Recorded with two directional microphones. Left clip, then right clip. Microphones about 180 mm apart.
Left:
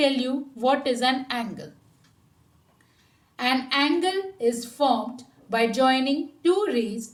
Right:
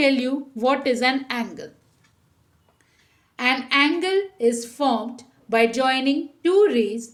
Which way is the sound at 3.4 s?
55° right (ahead or behind).